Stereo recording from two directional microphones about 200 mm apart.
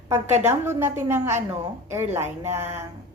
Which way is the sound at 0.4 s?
10° right (ahead or behind).